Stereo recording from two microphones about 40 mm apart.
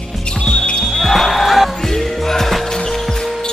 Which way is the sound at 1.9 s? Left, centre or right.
Centre.